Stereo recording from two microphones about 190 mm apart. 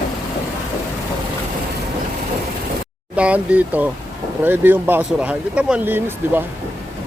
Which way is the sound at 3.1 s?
5° right (ahead or behind).